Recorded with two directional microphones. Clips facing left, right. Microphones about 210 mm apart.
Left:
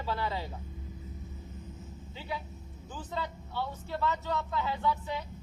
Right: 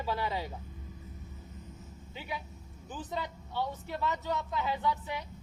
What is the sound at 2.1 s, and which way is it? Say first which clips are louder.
Speech: left 1 dB; 15° right (ahead or behind).